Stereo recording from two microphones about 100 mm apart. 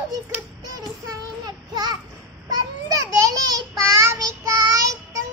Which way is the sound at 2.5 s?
35° right (ahead or behind).